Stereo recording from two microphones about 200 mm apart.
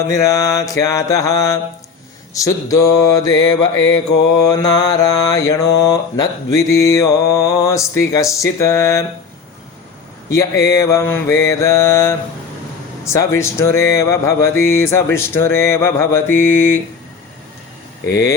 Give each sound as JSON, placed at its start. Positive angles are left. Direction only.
{"t": 0.1, "sound": "mantra", "side_deg": 15}
{"t": 10.3, "sound": "mantra", "side_deg": 15}
{"t": 13.1, "sound": "mantra", "side_deg": 15}